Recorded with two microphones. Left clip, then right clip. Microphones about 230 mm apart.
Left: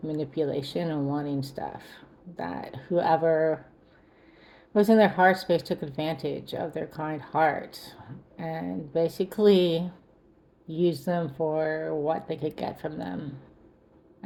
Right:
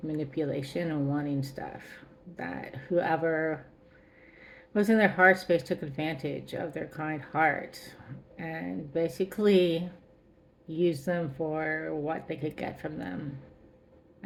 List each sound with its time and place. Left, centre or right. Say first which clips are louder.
0.1 s speech: left 4 dB; centre
4.7 s speech: left 5 dB; centre